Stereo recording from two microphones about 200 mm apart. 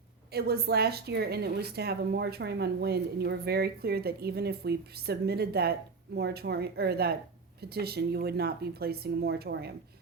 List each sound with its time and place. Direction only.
0.3 s a woman's voice: 50° right (ahead or behind)